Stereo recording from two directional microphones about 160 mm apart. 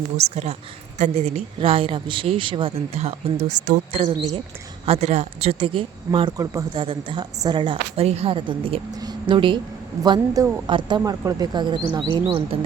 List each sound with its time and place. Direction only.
0.2 s a woman's voice: 40° right (ahead or behind); by 6.7 s 20° right (ahead or behind)
6.7 s a woman's voice: 30° right (ahead or behind)